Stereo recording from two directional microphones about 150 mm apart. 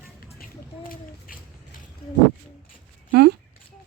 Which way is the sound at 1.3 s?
70° left (ahead or behind).